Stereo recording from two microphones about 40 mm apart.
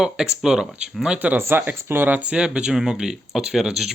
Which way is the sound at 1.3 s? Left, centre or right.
Right.